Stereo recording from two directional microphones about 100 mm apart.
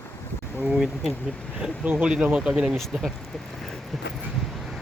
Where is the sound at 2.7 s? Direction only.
Centre (ahead or behind).